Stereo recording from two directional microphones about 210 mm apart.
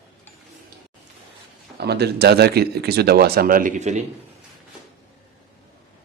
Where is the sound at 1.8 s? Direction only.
50° right (ahead or behind); by 4.0 s 35° right (ahead or behind).